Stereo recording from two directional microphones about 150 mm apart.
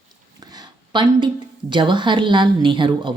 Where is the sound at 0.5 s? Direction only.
30° right (ahead or behind).